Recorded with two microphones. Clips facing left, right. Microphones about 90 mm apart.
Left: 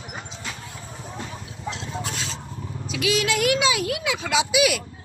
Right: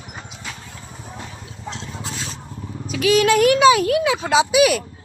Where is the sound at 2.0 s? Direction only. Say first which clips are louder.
Even; 90° left.